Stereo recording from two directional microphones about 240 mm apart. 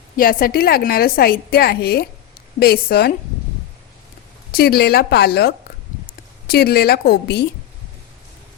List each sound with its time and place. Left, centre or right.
0.2 s a woman's voice: left
4.5 s a woman's voice: left